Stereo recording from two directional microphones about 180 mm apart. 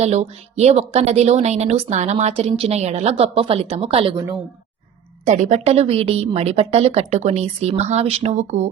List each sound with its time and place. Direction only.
0.0 s a woman's voice: 35° right (ahead or behind)
5.2 s a woman's voice: 40° right (ahead or behind)